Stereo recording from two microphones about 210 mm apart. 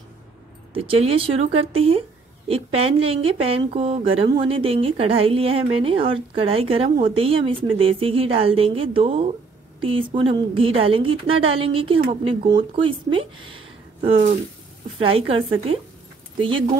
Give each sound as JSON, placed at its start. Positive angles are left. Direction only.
{"t": 0.7, "sound": "speech", "side_deg": -25}